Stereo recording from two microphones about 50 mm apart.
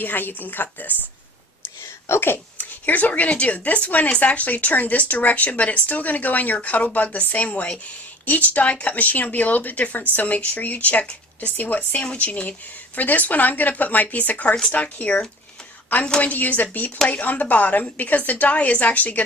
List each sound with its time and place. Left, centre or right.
0.0 s speech: left
2.0 s speech: left
2.6 s speech: left
16.2 s speech: left